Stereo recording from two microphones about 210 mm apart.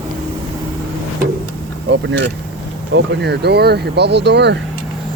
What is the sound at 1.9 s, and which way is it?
Speech, 60° right (ahead or behind).